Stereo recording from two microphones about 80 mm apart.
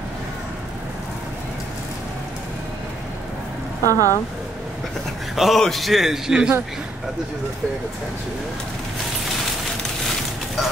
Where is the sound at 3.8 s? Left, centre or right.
Right.